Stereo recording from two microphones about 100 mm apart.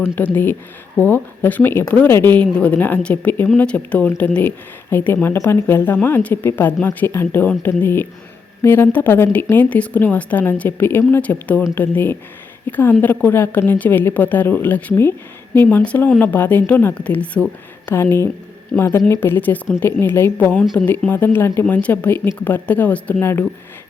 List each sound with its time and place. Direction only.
0.0 s a woman's voice: 20° left (ahead or behind)